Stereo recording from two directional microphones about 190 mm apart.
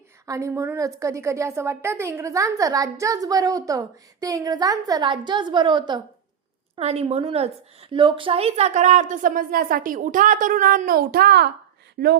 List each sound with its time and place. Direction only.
0.3 s a woman's voice: 15° right (ahead or behind); by 11.5 s 55° right (ahead or behind)